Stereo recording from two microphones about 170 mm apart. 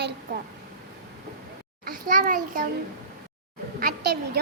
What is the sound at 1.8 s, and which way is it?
Speech, 55° right (ahead or behind).